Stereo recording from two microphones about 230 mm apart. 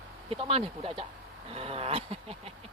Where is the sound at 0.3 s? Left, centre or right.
Right.